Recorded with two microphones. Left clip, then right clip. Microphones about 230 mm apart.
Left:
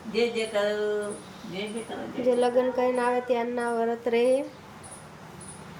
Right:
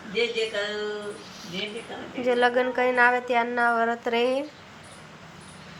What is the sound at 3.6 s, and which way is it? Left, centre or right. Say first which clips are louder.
Speech: right 4 dB; right.